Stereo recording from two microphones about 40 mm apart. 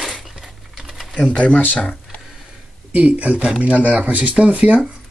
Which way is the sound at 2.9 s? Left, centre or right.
Right.